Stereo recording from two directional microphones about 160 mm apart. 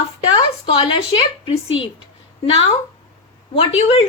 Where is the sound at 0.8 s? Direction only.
35° left (ahead or behind).